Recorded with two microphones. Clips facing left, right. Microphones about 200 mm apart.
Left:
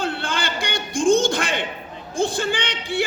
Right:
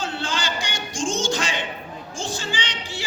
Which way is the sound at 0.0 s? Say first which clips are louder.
Left 2 dB; 60° left (ahead or behind).